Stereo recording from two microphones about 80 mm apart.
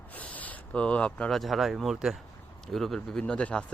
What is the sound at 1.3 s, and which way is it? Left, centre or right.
Speech, centre.